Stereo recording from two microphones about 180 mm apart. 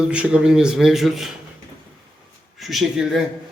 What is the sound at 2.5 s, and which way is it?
Speech, centre (ahead or behind).